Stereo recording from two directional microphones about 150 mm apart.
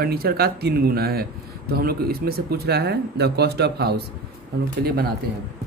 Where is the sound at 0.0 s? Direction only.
90° right.